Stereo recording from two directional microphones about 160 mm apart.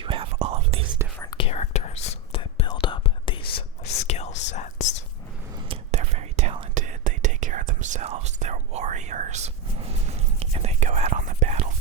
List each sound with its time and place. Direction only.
0.0 s whispering: 35° right (ahead or behind)
1.2 s whispering: 25° left (ahead or behind)
1.5 s whispering: 45° left (ahead or behind)
4.0 s whispering: 40° left (ahead or behind)
5.6 s whispering: 35° right (ahead or behind)
6.0 s whispering: 45° right (ahead or behind)
6.7 s whispering: 50° right (ahead or behind)